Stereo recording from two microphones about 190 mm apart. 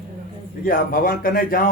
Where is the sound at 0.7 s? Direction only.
50° left (ahead or behind).